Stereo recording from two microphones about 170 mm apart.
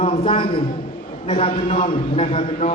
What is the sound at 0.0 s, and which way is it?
A man's voice, 35° left (ahead or behind).